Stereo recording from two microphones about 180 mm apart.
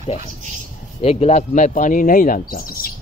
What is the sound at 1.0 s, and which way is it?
Speech, 35° left (ahead or behind).